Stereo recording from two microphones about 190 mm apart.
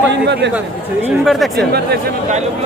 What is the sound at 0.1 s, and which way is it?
Speech, 65° right (ahead or behind).